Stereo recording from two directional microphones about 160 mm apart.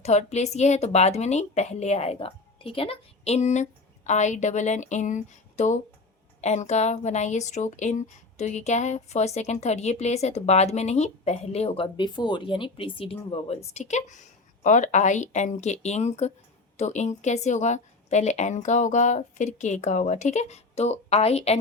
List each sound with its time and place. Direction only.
0.0 s speech: 45° left (ahead or behind)